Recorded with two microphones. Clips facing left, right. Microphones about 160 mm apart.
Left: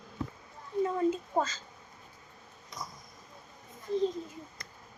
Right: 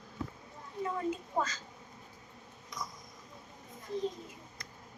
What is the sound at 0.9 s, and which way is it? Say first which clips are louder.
Speech: left 2 dB; 25° left (ahead or behind).